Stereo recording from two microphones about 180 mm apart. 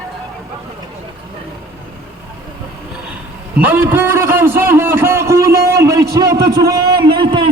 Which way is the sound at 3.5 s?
10° right (ahead or behind).